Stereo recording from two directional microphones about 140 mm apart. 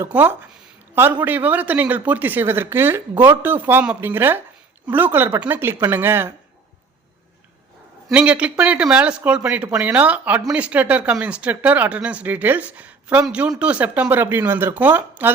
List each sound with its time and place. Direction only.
0.0 s speech: 15° right (ahead or behind)
8.1 s speech: 10° right (ahead or behind)